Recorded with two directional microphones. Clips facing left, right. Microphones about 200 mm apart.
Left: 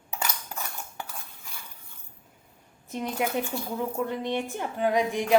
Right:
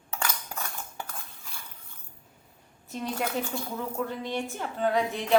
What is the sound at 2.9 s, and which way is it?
A woman's voice, 15° left (ahead or behind).